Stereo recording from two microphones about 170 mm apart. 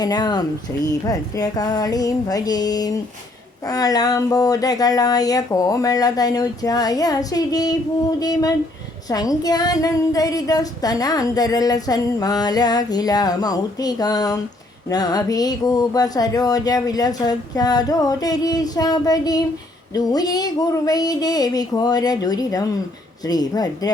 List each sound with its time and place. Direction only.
0.0 s female singing: 25° left (ahead or behind)